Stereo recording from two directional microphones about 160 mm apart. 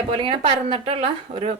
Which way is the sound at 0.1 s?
35° right (ahead or behind).